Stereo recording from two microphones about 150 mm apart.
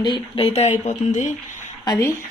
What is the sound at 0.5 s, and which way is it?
Speech, 50° left (ahead or behind).